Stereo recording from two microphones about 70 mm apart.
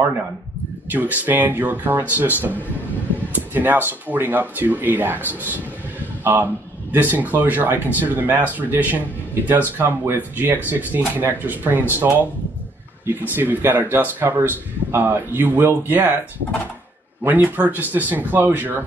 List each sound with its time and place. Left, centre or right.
0.8 s a man's voice: right
13.3 s a man's voice: right
17.3 s a man's voice: right